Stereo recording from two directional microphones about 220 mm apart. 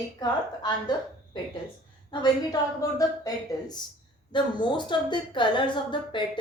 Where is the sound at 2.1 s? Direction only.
20° left (ahead or behind).